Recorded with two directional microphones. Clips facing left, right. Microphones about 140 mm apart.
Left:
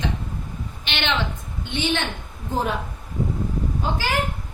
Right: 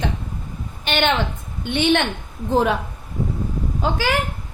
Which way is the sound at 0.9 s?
45° right (ahead or behind).